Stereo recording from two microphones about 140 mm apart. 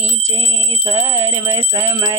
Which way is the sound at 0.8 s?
25° right (ahead or behind).